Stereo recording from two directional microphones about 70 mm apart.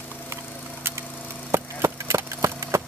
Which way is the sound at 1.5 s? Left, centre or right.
Right.